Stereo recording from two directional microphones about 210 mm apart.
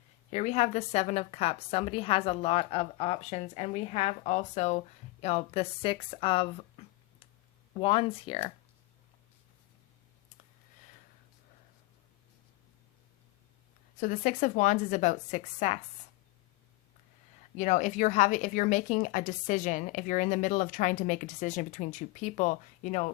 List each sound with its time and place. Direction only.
0.3 s speech: 30° left (ahead or behind)
7.8 s speech: 25° left (ahead or behind)
14.0 s speech: 40° left (ahead or behind)
17.6 s speech: 35° left (ahead or behind)